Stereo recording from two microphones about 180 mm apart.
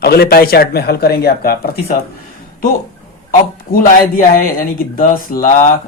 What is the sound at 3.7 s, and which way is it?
Speech, 50° left (ahead or behind).